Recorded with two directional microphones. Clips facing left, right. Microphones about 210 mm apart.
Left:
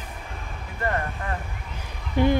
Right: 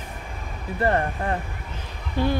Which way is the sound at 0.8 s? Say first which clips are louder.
Right 5 dB; 35° right (ahead or behind).